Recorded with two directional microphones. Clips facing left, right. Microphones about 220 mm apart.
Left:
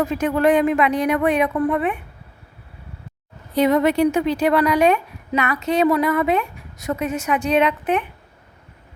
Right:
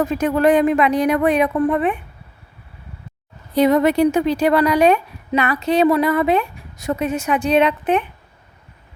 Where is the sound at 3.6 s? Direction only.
35° right (ahead or behind).